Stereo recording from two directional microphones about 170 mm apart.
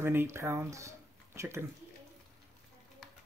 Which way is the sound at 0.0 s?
15° right (ahead or behind).